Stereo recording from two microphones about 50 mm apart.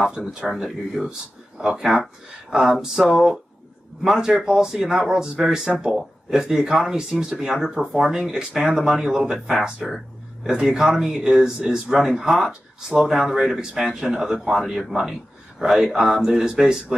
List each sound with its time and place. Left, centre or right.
0.2 s speech: centre
0.6 s speech: centre
4.0 s speech: centre
9.8 s a sound: centre
10.5 s speech: centre